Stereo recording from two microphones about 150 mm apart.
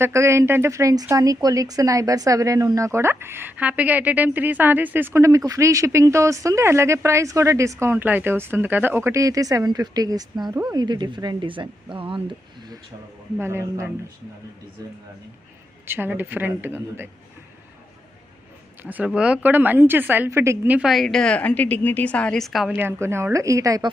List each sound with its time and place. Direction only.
0.0 s speech: 20° right (ahead or behind)
13.4 s speech: 15° right (ahead or behind)
15.9 s speech: 15° right (ahead or behind)
18.8 s speech: 10° right (ahead or behind)